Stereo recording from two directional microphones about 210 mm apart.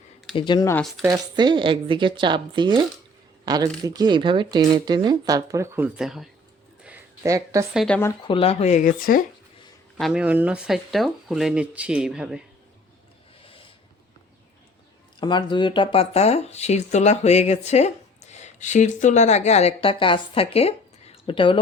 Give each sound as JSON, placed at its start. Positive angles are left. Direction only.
{"t": 0.3, "sound": "speech", "side_deg": 20}
{"t": 0.8, "sound": "speech", "side_deg": 0}
{"t": 1.0, "sound": "speech", "side_deg": -20}
{"t": 6.8, "sound": "a sound", "side_deg": -10}
{"t": 7.7, "sound": "speech", "side_deg": 0}
{"t": 8.2, "sound": "speech", "side_deg": 25}
{"t": 10.0, "sound": "speech", "side_deg": -5}
{"t": 13.4, "sound": "a sound", "side_deg": 25}
{"t": 15.2, "sound": "speech", "side_deg": 20}